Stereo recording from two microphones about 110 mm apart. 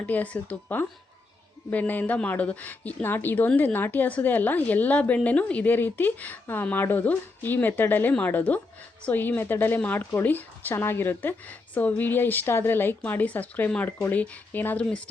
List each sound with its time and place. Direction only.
0.0 s a woman's voice: 15° left (ahead or behind)